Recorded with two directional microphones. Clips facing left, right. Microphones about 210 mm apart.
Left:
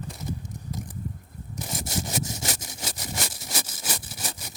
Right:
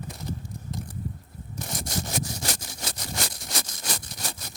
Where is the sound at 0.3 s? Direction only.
15° left (ahead or behind).